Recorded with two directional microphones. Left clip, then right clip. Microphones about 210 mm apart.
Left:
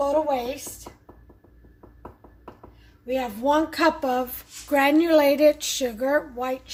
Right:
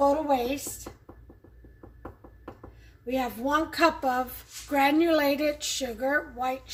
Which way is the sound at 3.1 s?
35° left (ahead or behind).